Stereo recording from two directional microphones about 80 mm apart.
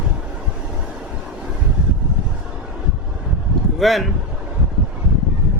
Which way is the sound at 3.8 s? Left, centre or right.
Centre.